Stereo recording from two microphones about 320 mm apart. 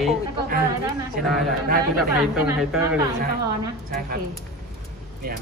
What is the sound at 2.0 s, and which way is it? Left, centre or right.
Speech, centre.